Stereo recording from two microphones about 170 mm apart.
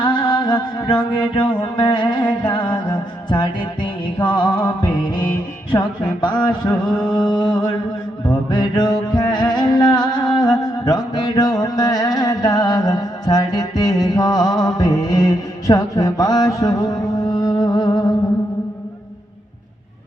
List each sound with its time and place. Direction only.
0.0 s music: 25° left (ahead or behind)
6.7 s mantra: 5° left (ahead or behind)
7.3 s music: 25° left (ahead or behind)